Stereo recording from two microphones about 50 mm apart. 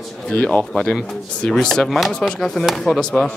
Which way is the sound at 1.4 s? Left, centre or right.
Centre.